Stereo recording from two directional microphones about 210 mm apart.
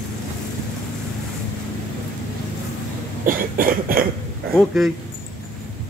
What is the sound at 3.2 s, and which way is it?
Cough, 40° right (ahead or behind).